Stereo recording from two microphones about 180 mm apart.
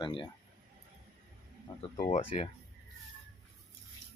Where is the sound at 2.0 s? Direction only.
40° left (ahead or behind).